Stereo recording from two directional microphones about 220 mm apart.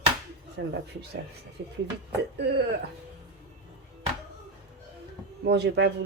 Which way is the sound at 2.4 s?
50° right (ahead or behind).